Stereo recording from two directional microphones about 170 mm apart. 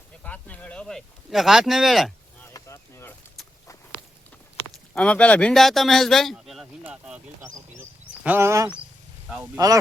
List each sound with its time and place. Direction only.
0.2 s speech: 10° left (ahead or behind)
2.5 s a sound: 15° left (ahead or behind)
4.9 s speech: 5° left (ahead or behind)
8.2 s speech: 10° right (ahead or behind)